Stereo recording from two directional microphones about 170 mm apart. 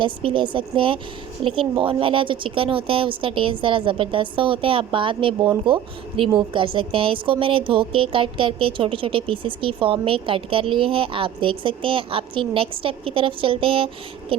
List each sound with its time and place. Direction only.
0.0 s a woman's voice: 30° right (ahead or behind)